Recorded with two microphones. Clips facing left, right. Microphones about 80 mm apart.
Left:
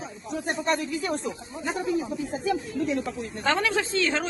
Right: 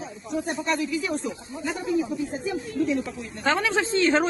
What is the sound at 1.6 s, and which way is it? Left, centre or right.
Speech, left.